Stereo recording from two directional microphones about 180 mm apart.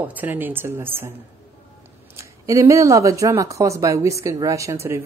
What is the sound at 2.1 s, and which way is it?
A woman's voice, 15° right (ahead or behind).